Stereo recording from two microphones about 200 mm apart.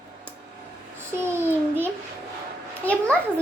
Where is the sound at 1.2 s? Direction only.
10° right (ahead or behind).